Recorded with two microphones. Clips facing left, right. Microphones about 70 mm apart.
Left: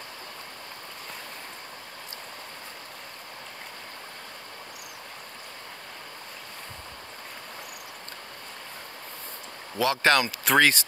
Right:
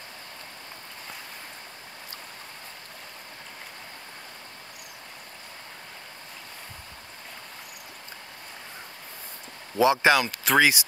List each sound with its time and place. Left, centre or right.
9.8 s speech: centre
10.1 s speech: centre